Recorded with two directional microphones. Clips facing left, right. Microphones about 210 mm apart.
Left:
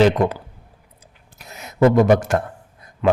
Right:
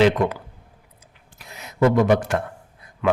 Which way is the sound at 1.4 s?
45° left (ahead or behind).